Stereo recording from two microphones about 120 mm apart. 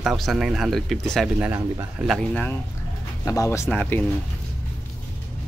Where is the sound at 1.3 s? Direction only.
10° right (ahead or behind).